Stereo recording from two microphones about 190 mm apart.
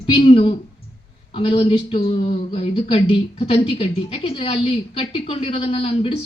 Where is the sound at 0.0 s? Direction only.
30° left (ahead or behind).